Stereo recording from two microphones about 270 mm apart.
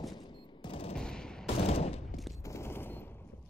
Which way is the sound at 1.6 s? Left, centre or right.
Left.